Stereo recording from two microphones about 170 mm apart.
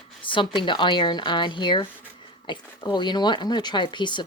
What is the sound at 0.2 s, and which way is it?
Speech, 30° left (ahead or behind).